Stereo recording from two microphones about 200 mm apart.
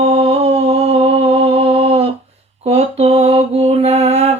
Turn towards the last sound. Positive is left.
turn(degrees=-35)  # may be behind; listen again after turning